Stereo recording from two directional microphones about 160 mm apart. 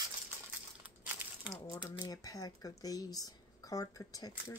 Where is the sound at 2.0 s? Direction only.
25° left (ahead or behind).